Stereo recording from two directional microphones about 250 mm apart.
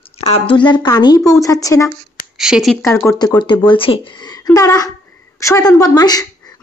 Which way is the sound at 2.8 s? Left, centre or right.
Centre.